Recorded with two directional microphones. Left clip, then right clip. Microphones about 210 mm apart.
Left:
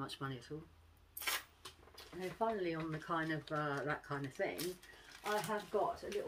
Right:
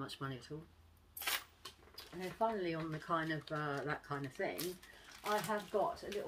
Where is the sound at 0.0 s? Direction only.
Centre (ahead or behind).